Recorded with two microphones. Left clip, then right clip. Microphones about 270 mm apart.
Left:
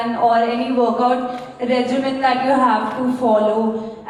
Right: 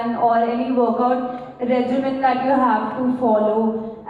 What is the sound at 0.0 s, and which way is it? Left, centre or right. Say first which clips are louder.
A woman's voice: left 2 dB; centre.